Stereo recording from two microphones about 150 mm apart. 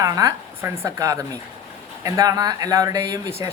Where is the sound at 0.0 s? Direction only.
20° right (ahead or behind).